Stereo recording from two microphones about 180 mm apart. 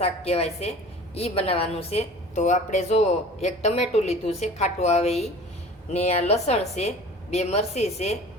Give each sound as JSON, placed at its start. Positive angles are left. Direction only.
{"t": 0.0, "sound": "a woman's voice", "side_deg": 35}